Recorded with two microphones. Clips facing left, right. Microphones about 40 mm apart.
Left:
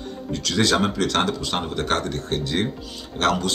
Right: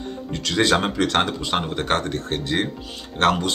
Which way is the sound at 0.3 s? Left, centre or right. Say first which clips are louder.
Right 1 dB; right.